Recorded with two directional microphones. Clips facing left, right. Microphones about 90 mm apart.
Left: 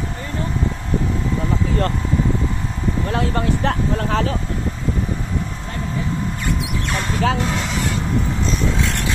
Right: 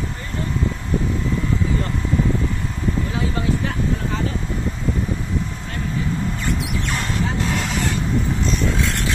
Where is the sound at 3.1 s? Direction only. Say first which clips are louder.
Left 3 dB; 60° left (ahead or behind).